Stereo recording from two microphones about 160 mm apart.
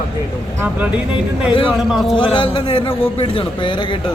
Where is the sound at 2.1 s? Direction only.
30° left (ahead or behind).